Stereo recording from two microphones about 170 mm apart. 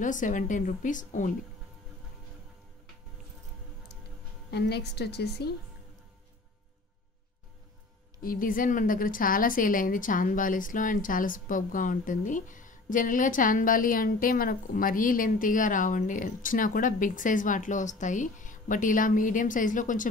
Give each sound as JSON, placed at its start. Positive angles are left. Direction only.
{"t": 0.0, "sound": "a woman's voice", "side_deg": 50}
{"t": 4.5, "sound": "a woman's voice", "side_deg": 70}
{"t": 8.2, "sound": "a woman's voice", "side_deg": 55}